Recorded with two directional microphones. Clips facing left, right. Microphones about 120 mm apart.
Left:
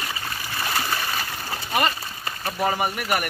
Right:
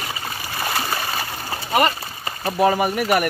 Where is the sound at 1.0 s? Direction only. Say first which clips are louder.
Right 2 dB; 30° right (ahead or behind).